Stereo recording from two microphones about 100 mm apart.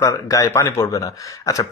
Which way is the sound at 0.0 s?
30° left (ahead or behind).